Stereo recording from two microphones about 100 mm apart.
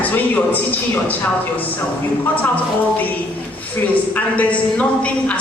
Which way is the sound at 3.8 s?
20° left (ahead or behind).